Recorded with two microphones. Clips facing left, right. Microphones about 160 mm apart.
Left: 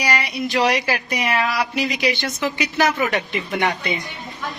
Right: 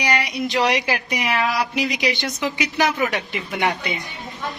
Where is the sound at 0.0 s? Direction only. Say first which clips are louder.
Even; 20° right (ahead or behind).